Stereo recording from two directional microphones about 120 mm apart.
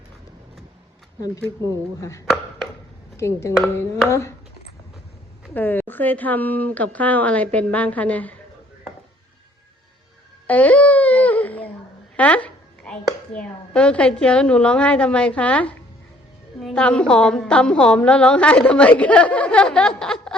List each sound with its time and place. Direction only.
2.0 s speech: 25° left (ahead or behind)
5.5 s a woman's voice: 15° left (ahead or behind)
10.4 s babbling: 10° left (ahead or behind)
12.1 s a woman's voice: 10° left (ahead or behind)